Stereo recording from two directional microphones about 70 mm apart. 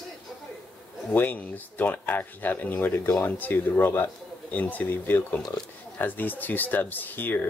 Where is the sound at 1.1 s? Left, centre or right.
Left.